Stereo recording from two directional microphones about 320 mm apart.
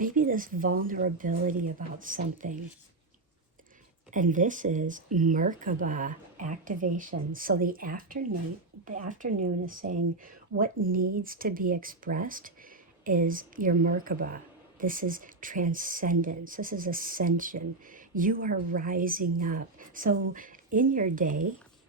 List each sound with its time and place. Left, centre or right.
0.0 s speech: right
4.1 s speech: right